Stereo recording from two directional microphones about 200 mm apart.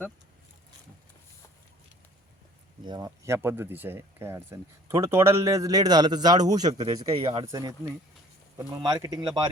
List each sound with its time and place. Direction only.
2.8 s a man's voice: 20° right (ahead or behind)